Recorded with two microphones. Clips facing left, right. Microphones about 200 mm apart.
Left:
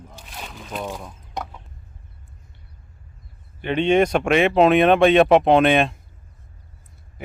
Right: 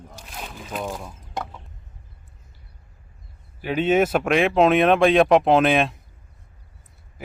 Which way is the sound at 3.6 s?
5° right (ahead or behind).